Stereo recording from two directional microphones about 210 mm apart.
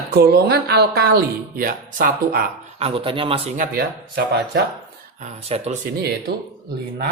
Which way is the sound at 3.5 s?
40° right (ahead or behind).